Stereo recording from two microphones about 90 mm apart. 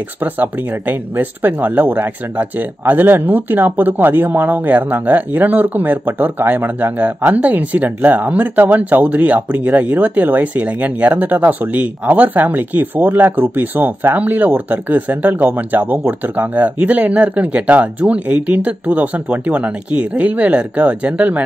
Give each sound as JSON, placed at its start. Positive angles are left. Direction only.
{"t": 0.2, "sound": "speech", "side_deg": -20}